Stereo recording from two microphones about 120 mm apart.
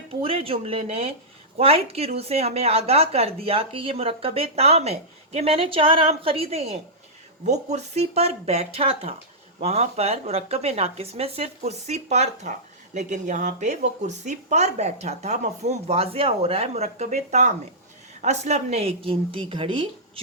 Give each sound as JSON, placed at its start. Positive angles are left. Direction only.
{"t": 0.2, "sound": "a woman's voice", "side_deg": -50}
{"t": 7.4, "sound": "a woman's voice", "side_deg": -70}